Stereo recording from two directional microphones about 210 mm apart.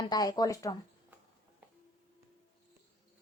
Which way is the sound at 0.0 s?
20° left (ahead or behind).